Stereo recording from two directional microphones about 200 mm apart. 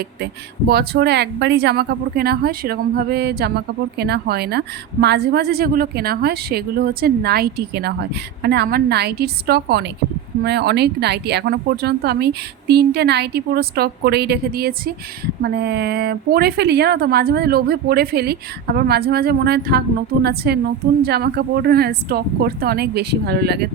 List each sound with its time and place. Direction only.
0.7 s speech: 55° right (ahead or behind)